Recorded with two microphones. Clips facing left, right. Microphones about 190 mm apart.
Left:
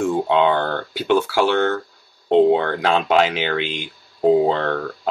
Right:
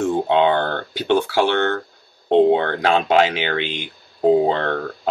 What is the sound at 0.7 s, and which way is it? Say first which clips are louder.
Speech: even; 20° right (ahead or behind).